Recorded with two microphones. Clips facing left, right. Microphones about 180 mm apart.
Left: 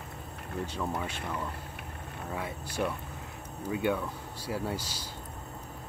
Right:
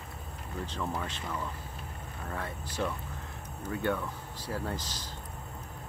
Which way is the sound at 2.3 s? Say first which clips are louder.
Left 1 dB; 10° left (ahead or behind).